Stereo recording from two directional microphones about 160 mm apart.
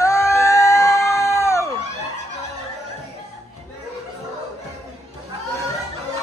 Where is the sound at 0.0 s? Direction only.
20° left (ahead or behind).